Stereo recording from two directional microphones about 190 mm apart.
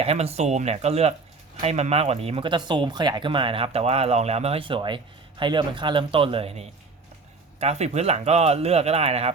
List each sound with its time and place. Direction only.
0.0 s speech: 30° right (ahead or behind)